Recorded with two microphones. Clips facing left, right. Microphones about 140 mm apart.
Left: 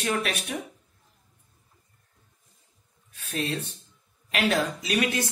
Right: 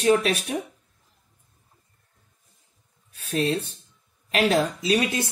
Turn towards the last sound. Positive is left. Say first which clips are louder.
# right 3 dB
turn(degrees=-30)  # may be behind; listen again after turning